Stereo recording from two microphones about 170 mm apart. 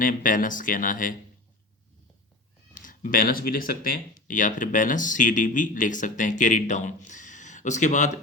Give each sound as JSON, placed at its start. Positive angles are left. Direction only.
{"t": 0.0, "sound": "speech", "side_deg": 50}
{"t": 2.7, "sound": "speech", "side_deg": 50}